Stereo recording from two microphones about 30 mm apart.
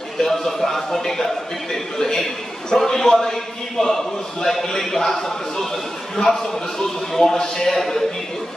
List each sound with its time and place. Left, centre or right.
0.2 s a man's voice: centre